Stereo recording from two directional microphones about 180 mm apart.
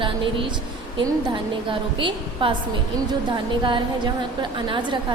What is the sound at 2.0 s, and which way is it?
A woman's voice, 30° right (ahead or behind).